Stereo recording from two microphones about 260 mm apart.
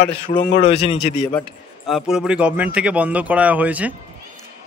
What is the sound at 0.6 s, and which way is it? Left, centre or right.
Speech, left.